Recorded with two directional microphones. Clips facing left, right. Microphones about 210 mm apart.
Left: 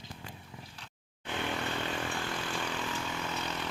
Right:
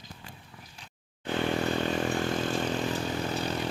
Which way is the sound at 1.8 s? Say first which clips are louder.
Right 8 dB; 40° right (ahead or behind).